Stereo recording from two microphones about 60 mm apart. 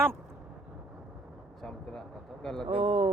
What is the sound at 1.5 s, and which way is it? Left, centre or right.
Speech, centre.